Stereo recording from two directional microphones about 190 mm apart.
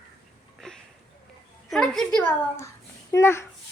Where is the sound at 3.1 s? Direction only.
15° left (ahead or behind).